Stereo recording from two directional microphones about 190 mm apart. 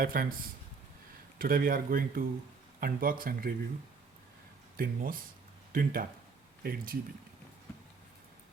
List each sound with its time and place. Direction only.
0.0 s speech: 50° right (ahead or behind)
1.4 s speech: 50° right (ahead or behind)
4.8 s speech: 50° right (ahead or behind)